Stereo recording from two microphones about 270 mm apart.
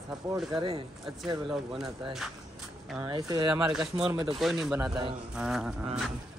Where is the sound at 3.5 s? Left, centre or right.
Centre.